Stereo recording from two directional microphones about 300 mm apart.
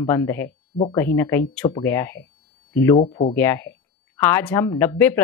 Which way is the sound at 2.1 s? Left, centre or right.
Left.